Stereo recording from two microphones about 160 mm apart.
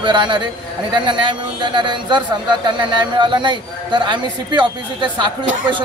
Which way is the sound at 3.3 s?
30° right (ahead or behind).